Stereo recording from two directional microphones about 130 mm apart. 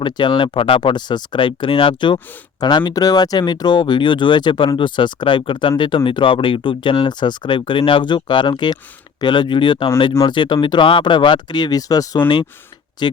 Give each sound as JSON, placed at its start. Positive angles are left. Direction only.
{"t": 0.0, "sound": "speech", "side_deg": 40}